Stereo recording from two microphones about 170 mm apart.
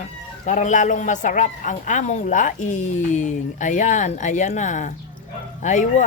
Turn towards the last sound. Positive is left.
turn(degrees=45)  # may be behind; listen again after turning